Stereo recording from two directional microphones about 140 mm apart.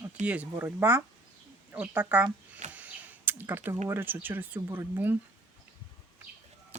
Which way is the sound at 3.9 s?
15° right (ahead or behind).